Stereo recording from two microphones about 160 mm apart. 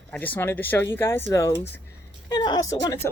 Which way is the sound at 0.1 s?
10° left (ahead or behind).